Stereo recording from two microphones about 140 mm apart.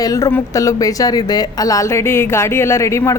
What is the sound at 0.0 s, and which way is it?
A woman's voice, 25° left (ahead or behind).